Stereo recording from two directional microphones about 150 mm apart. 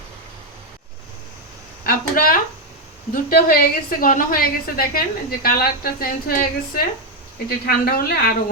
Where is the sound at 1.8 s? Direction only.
70° left (ahead or behind).